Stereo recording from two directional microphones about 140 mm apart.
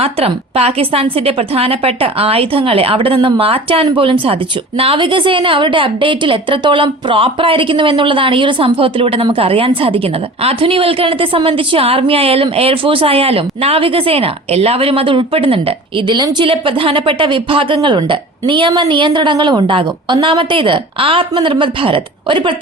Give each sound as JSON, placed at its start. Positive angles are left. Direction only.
{"t": 0.0, "sound": "a woman's voice", "side_deg": -45}